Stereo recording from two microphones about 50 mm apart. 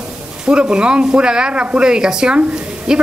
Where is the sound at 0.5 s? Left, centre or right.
Centre.